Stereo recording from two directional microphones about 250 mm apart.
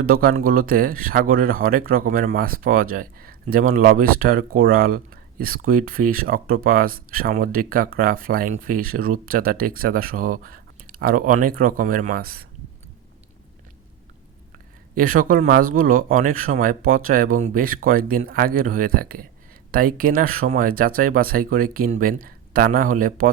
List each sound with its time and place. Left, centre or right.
0.0 s speech: right
14.9 s speech: right